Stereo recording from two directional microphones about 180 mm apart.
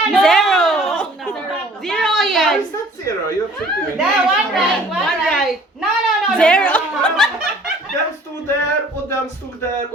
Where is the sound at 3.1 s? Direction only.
15° left (ahead or behind).